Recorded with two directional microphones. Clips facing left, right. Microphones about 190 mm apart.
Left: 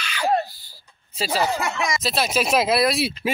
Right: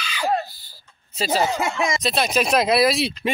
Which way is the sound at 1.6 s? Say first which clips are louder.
Right 2 dB; 25° right (ahead or behind).